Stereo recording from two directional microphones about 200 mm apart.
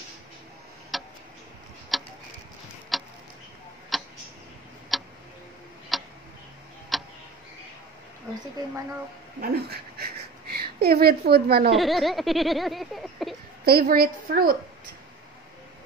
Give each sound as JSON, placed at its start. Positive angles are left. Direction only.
{"t": 0.9, "sound": "tick-tock", "side_deg": 0}
{"t": 2.9, "sound": "a sound", "side_deg": 0}
{"t": 3.9, "sound": "tick-tock", "side_deg": 0}
{"t": 9.4, "sound": "speech", "side_deg": -50}
{"t": 11.7, "sound": "speech", "side_deg": 0}
{"t": 13.7, "sound": "a woman's voice", "side_deg": -50}